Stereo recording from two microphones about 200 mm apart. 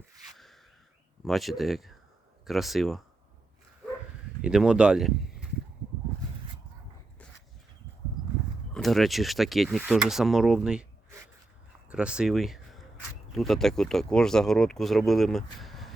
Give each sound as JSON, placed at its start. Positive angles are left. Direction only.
{"t": 0.3, "sound": "a sound", "side_deg": 0}
{"t": 1.2, "sound": "speech", "side_deg": 0}
{"t": 4.4, "sound": "speech", "side_deg": -5}
{"t": 8.7, "sound": "speech", "side_deg": 0}
{"t": 11.9, "sound": "speech", "side_deg": -5}
{"t": 15.5, "sound": "a sound", "side_deg": 0}